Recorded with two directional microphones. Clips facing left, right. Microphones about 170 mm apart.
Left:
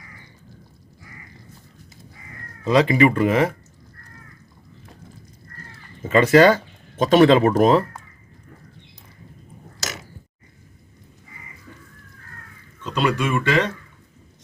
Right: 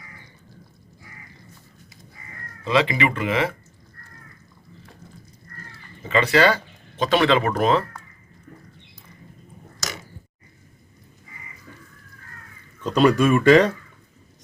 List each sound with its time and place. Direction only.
2.6 s speech: 40° left (ahead or behind)
6.1 s speech: 45° left (ahead or behind)
12.8 s speech: 40° right (ahead or behind)